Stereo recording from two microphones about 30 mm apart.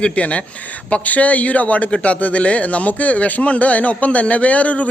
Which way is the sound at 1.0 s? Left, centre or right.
Left.